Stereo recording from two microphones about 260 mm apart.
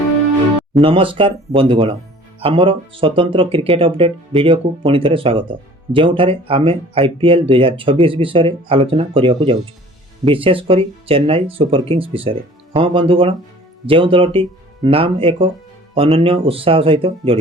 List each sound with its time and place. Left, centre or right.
0.8 s speech: centre